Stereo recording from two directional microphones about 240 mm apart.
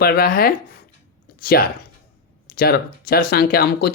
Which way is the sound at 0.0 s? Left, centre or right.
Left.